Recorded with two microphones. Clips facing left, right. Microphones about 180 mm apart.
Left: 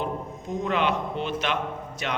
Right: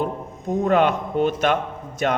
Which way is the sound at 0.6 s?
50° right (ahead or behind).